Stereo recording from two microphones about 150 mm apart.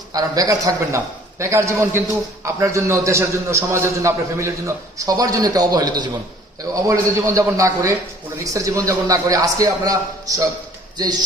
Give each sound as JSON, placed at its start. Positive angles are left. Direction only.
{"t": 0.1, "sound": "a man's voice", "side_deg": -25}